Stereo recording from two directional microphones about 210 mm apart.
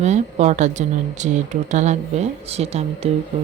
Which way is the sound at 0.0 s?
30° right (ahead or behind).